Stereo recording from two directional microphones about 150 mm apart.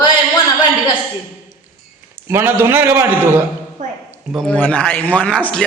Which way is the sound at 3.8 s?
60° right (ahead or behind).